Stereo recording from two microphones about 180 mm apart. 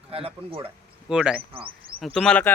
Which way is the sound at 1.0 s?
5° right (ahead or behind).